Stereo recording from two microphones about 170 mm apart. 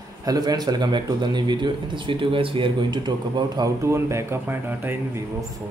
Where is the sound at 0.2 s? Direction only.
20° right (ahead or behind).